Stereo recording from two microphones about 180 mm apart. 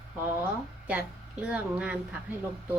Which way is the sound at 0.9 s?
5° right (ahead or behind).